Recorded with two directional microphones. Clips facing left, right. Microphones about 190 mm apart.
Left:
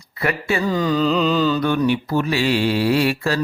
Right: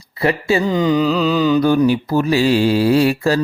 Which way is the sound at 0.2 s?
30° right (ahead or behind).